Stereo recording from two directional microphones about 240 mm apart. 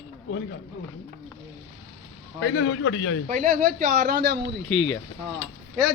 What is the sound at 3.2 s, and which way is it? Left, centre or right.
Speech, right.